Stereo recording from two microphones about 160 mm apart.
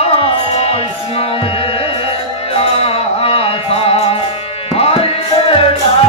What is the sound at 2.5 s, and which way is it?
Music, 35° left (ahead or behind).